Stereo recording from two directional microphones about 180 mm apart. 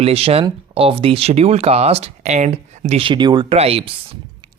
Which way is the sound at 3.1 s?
25° right (ahead or behind).